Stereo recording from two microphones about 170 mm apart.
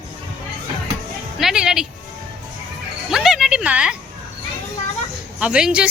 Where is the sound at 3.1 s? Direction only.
Centre (ahead or behind).